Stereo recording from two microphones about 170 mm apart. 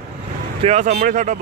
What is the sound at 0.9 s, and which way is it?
Speech, 55° right (ahead or behind).